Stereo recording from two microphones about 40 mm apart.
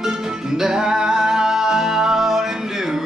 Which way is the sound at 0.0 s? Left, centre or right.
Centre.